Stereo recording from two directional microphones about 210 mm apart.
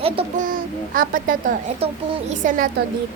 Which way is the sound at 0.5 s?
40° right (ahead or behind).